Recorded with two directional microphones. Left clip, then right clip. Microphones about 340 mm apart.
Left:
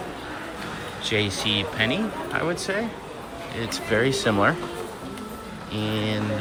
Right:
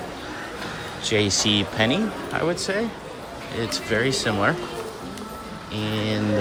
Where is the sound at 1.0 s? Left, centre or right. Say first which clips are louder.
Right 3 dB; centre.